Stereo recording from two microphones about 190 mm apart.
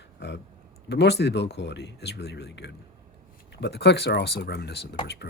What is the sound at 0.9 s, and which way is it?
Speech, 60° left (ahead or behind).